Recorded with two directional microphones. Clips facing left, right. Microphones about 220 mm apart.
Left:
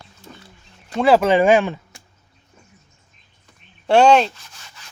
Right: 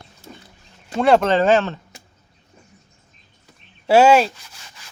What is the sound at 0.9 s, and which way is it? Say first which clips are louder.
Speech: left 1 dB; centre (ahead or behind).